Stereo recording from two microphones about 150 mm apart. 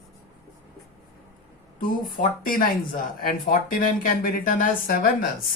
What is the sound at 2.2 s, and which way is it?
Speech, 70° left (ahead or behind).